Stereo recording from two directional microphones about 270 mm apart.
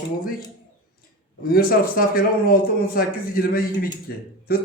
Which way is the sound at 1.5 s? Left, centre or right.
Left.